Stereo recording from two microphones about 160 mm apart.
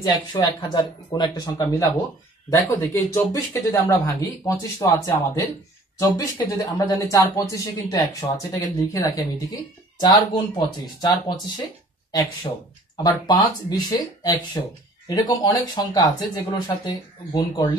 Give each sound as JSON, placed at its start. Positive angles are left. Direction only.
{"t": 0.0, "sound": "speech", "side_deg": 25}
{"t": 12.9, "sound": "speech", "side_deg": 25}